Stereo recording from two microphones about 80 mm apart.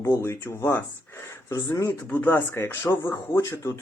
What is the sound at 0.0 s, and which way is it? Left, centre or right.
Speech, left.